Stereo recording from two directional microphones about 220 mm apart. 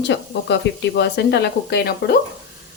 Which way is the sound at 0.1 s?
50° left (ahead or behind).